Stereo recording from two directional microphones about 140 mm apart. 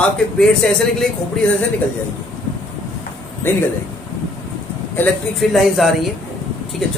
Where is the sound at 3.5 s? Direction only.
15° left (ahead or behind).